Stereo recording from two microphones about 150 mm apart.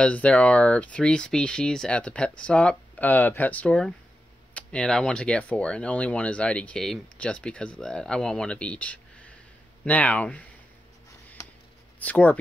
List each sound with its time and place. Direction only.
0.0 s speech: 10° left (ahead or behind)
12.0 s speech: 10° left (ahead or behind)